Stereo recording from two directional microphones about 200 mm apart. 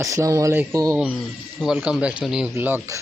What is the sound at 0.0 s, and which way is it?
Speech, 15° right (ahead or behind).